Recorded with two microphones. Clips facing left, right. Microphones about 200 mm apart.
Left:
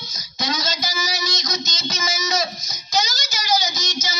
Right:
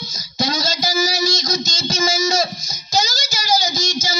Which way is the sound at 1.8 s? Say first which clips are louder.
Right 7 dB; 30° right (ahead or behind).